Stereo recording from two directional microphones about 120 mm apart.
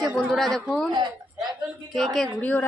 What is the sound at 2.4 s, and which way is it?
Speech, 10° left (ahead or behind).